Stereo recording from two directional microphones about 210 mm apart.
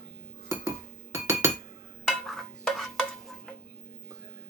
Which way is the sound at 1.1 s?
15° right (ahead or behind).